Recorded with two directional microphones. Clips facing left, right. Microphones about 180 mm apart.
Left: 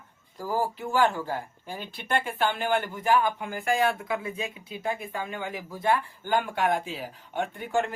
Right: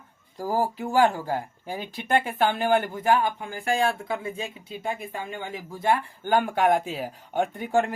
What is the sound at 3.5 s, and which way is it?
Speech, 30° right (ahead or behind).